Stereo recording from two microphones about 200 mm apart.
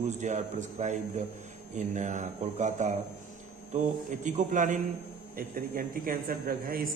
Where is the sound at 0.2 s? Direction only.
35° right (ahead or behind).